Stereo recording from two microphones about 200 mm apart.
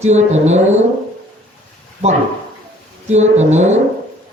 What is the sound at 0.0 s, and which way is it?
Speech, 35° right (ahead or behind).